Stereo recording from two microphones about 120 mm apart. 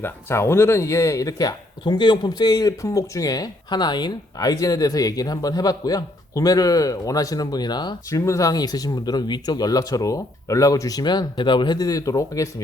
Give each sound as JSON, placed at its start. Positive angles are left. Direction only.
{"t": 0.0, "sound": "speech", "side_deg": 20}
{"t": 8.1, "sound": "speech", "side_deg": 25}